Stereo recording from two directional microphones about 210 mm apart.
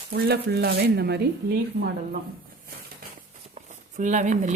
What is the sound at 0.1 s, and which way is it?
Speech, 50° right (ahead or behind).